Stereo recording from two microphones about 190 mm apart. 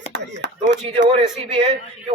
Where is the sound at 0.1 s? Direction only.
65° right (ahead or behind).